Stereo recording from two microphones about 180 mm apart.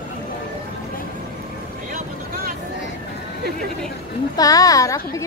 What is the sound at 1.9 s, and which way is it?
Vehicle, 55° right (ahead or behind).